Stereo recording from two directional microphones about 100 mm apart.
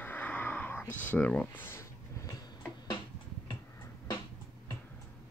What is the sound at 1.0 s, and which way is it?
Speech, 15° left (ahead or behind).